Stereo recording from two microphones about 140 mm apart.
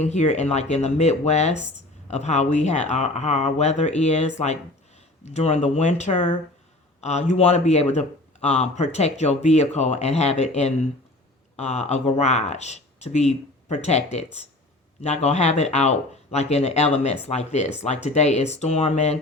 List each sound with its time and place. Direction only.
0.0 s speech: 55° left (ahead or behind)